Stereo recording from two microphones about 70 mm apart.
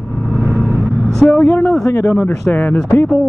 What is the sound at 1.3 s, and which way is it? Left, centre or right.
Speech, left.